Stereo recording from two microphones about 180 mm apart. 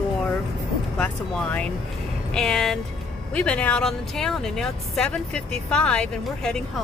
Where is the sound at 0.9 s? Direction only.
5° left (ahead or behind).